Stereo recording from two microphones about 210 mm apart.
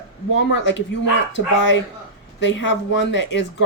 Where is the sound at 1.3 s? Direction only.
60° left (ahead or behind).